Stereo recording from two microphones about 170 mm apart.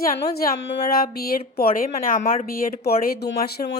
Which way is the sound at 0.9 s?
60° left (ahead or behind).